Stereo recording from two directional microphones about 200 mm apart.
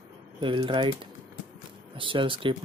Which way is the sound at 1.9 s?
25° right (ahead or behind).